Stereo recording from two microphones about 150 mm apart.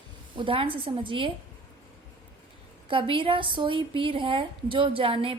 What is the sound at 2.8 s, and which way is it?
A woman's voice, 35° right (ahead or behind).